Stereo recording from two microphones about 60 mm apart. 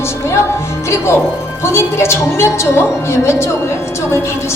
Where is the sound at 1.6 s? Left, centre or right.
Left.